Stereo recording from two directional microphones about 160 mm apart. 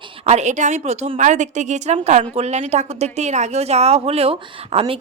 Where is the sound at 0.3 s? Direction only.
45° right (ahead or behind).